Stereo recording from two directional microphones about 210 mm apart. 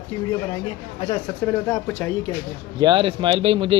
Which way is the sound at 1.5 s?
10° left (ahead or behind).